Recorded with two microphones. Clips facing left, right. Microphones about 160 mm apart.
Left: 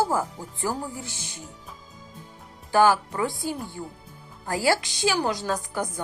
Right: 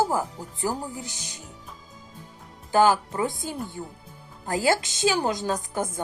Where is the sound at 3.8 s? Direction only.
30° right (ahead or behind).